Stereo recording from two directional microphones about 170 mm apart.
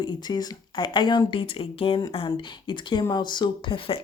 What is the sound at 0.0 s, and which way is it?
Speech, 25° left (ahead or behind).